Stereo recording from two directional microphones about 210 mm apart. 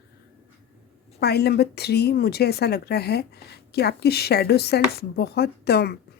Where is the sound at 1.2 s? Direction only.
50° left (ahead or behind).